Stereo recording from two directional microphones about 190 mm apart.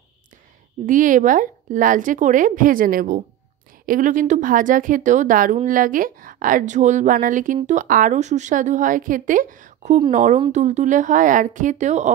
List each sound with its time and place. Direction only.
0.8 s a woman's voice: 45° right (ahead or behind)